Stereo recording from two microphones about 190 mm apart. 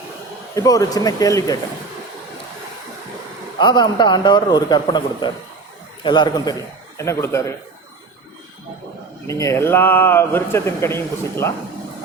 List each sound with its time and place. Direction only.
0.5 s a man's voice: 20° left (ahead or behind)
3.6 s a man's voice: 25° left (ahead or behind)
9.2 s speech: 15° left (ahead or behind)